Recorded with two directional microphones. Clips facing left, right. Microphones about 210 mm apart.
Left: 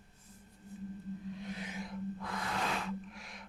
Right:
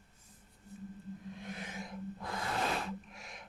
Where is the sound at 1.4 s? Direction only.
50° right (ahead or behind).